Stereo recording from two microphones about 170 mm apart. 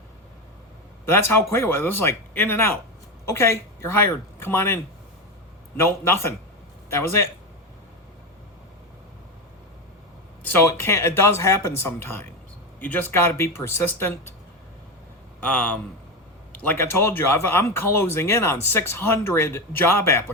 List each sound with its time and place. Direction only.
1.0 s speech: 15° left (ahead or behind)
10.4 s speech: 15° left (ahead or behind)
15.4 s speech: 10° left (ahead or behind)